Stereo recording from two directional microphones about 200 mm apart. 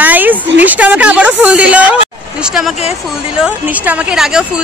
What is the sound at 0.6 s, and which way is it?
A woman's voice, 5° right (ahead or behind).